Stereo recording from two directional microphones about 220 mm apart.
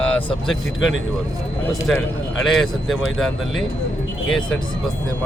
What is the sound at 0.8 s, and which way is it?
Speech, 60° left (ahead or behind).